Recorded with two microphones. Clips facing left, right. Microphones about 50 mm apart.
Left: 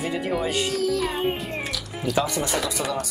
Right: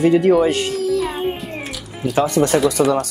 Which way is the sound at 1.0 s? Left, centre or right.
Centre.